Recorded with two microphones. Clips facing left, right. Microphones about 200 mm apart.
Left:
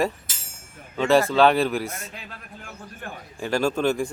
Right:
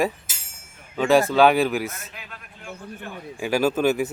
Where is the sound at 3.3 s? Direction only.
5° right (ahead or behind).